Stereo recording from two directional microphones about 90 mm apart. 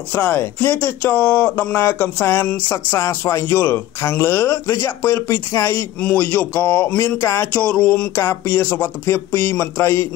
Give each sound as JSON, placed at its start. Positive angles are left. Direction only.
{"t": 0.1, "sound": "speech", "side_deg": 20}
{"t": 3.0, "sound": "speech", "side_deg": 35}
{"t": 5.9, "sound": "speech", "side_deg": 15}
{"t": 7.2, "sound": "a sound", "side_deg": 30}
{"t": 7.5, "sound": "a sound", "side_deg": 15}
{"t": 8.2, "sound": "speech", "side_deg": 30}